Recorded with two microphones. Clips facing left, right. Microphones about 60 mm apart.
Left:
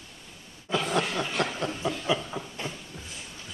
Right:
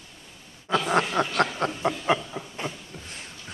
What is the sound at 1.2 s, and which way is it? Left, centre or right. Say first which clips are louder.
Snicker: right 5 dB; right.